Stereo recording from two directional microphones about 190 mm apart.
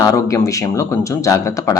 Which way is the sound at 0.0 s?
20° left (ahead or behind).